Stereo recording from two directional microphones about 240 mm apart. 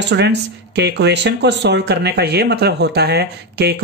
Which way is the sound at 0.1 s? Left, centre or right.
Right.